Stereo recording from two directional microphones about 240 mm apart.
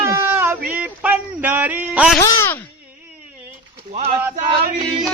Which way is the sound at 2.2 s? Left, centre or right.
Centre.